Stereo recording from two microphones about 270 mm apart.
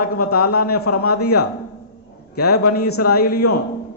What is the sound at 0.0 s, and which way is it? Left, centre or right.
A man's voice, left.